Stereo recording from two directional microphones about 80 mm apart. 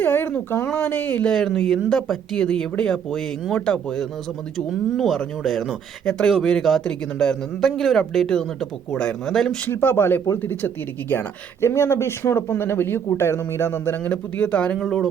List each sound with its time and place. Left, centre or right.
0.0 s speech: left
1.3 s a man's voice: centre
9.6 s speech: left
14.8 s a man's voice: centre